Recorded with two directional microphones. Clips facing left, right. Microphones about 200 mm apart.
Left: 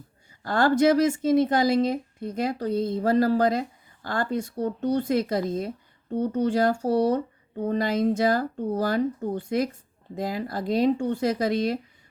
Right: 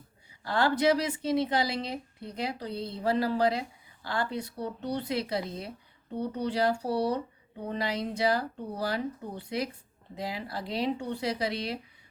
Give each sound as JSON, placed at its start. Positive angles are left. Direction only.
{"t": 0.3, "sound": "speech", "side_deg": 45}